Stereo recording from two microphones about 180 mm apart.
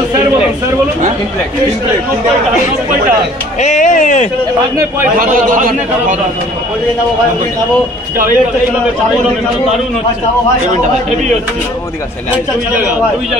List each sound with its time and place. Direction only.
3.6 s speech: 45° left (ahead or behind)
5.2 s a man's voice: 50° right (ahead or behind)